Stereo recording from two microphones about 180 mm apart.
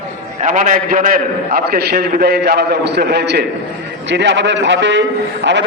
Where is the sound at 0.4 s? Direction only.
45° right (ahead or behind); by 3.4 s 65° right (ahead or behind).